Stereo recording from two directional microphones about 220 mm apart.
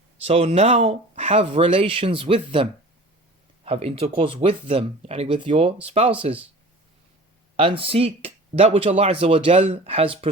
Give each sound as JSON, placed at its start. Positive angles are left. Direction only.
{"t": 0.2, "sound": "speech", "side_deg": -30}
{"t": 7.5, "sound": "speech", "side_deg": -25}